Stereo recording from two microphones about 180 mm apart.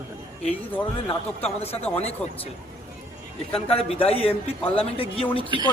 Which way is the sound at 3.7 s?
35° left (ahead or behind).